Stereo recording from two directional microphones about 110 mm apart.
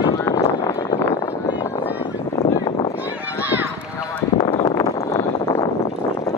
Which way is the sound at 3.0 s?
15° right (ahead or behind).